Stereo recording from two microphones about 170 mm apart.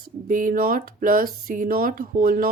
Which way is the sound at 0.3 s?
55° right (ahead or behind).